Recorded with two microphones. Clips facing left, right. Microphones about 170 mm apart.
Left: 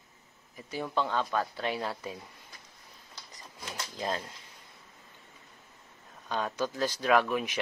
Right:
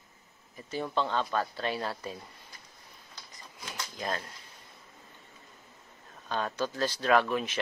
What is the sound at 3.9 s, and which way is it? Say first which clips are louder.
Speech: left 1 dB; 20° left (ahead or behind).